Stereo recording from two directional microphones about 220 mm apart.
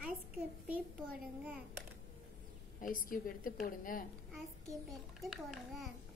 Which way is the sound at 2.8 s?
40° left (ahead or behind).